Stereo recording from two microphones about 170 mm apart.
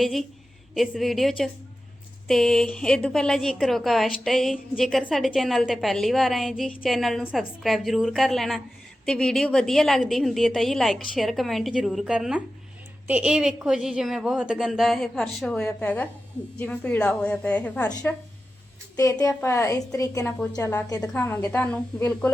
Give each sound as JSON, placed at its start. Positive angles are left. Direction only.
{"t": 0.0, "sound": "a woman's voice", "side_deg": 0}